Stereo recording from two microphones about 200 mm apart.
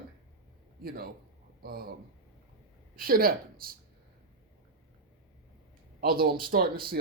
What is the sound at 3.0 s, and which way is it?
Speech, 45° right (ahead or behind).